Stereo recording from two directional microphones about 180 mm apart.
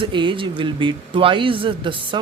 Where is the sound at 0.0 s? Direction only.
25° right (ahead or behind).